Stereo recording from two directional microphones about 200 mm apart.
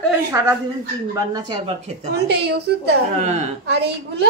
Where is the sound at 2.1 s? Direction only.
55° right (ahead or behind).